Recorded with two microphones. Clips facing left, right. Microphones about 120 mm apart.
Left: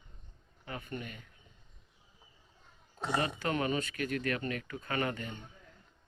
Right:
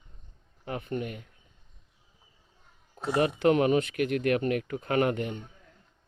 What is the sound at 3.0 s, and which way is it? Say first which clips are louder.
Music: right 5 dB; 60° right (ahead or behind).